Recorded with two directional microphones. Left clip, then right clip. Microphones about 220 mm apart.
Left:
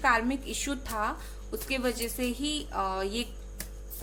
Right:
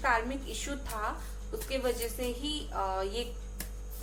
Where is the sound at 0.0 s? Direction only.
50° left (ahead or behind).